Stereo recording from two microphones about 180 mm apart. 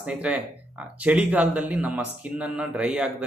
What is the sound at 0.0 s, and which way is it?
Speech, 5° right (ahead or behind).